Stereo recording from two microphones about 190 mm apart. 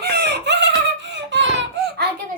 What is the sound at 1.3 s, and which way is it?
Baby laughter, 70° right (ahead or behind).